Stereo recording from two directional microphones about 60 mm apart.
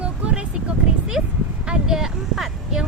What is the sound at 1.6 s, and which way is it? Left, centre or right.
Speech, centre.